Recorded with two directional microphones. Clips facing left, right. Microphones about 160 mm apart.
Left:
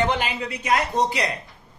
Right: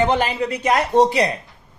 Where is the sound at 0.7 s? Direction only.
40° right (ahead or behind).